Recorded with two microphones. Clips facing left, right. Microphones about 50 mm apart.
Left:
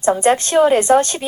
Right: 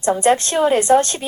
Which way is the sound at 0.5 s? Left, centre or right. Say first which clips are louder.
Left 3 dB; centre.